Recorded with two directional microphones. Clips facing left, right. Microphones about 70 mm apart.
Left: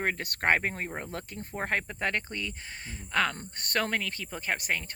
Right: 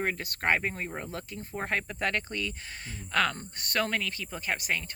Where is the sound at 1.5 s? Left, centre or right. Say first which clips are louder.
Left 1 dB; left.